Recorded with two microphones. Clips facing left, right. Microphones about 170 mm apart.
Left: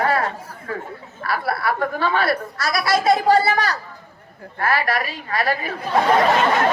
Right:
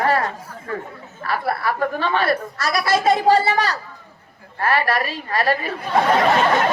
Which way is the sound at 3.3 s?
30° right (ahead or behind).